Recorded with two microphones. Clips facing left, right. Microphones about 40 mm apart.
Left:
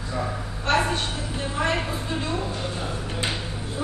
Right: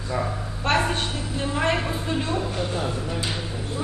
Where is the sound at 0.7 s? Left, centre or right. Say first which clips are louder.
Even; right.